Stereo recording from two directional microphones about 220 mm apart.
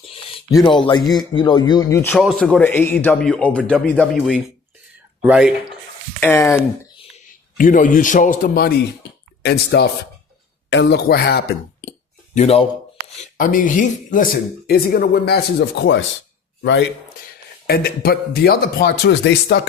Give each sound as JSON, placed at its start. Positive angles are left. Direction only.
{"t": 0.0, "sound": "a man's voice", "side_deg": 25}
{"t": 6.1, "sound": "speech", "side_deg": 10}
{"t": 7.6, "sound": "a man's voice", "side_deg": 35}
{"t": 17.7, "sound": "speech", "side_deg": 45}